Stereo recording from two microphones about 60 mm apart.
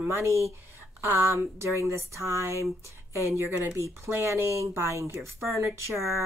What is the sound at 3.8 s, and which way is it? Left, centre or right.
Speech, right.